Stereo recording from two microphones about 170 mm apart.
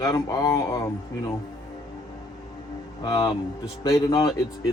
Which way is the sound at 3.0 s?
20° left (ahead or behind).